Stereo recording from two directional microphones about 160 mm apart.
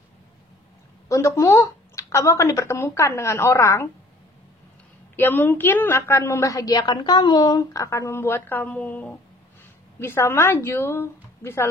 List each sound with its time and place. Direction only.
1.0 s a woman's voice: 20° left (ahead or behind)
5.1 s a woman's voice: 10° left (ahead or behind)